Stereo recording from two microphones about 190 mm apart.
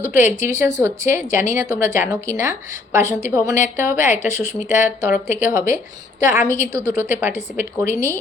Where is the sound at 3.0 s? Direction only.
40° left (ahead or behind).